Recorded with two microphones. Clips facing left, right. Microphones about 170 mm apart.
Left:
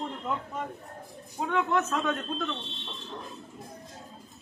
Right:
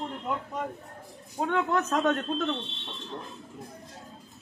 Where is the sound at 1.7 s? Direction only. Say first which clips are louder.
Right 2 dB; 40° right (ahead or behind).